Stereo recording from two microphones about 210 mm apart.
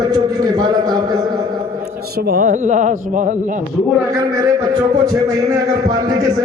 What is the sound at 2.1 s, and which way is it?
A man's voice, 45° right (ahead or behind).